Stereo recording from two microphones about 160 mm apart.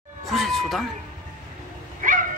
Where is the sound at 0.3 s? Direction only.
Centre (ahead or behind).